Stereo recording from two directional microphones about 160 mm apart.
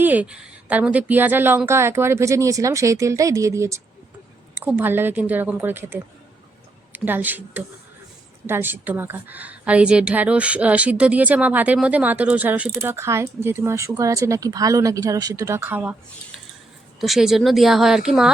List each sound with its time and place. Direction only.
0.0 s a woman's voice: 10° right (ahead or behind)
17.0 s speech: centre (ahead or behind)